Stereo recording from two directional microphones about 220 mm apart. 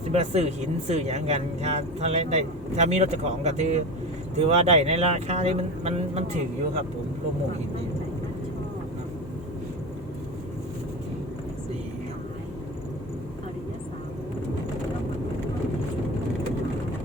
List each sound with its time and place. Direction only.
0.1 s a man's voice: 30° right (ahead or behind)